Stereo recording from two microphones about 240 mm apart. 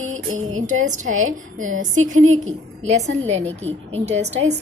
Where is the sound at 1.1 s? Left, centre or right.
Right.